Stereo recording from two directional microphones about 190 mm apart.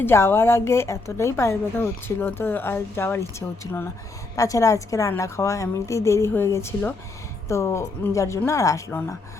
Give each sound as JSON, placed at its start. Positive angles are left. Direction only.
{"t": 0.0, "sound": "a woman's voice", "side_deg": 10}